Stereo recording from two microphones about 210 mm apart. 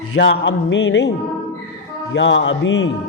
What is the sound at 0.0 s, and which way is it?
Music, 75° left (ahead or behind).